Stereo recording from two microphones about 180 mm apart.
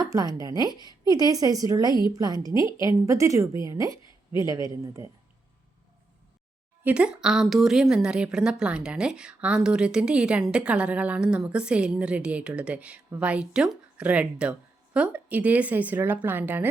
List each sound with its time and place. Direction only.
0.0 s a woman's voice: 20° right (ahead or behind)
0.7 s a woman's voice: 20° left (ahead or behind)
1.0 s a woman's voice: 20° right (ahead or behind)
6.8 s a woman's voice: 5° right (ahead or behind)